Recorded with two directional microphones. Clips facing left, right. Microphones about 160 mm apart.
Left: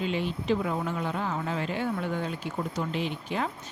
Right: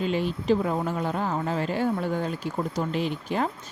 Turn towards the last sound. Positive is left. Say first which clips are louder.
# right 4 dB
turn(degrees=-40)  # may be behind; listen again after turning